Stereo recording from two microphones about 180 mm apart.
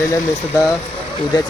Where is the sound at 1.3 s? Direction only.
25° left (ahead or behind).